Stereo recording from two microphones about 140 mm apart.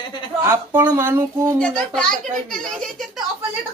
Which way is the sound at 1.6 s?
5° left (ahead or behind).